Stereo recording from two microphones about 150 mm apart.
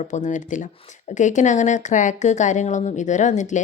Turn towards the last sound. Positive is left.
turn(degrees=55)  # may be behind; listen again after turning